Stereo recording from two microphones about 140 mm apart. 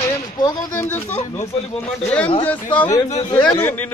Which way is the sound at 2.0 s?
10° left (ahead or behind).